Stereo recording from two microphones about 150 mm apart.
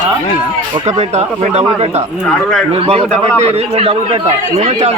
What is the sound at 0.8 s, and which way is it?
A man's voice, 50° right (ahead or behind).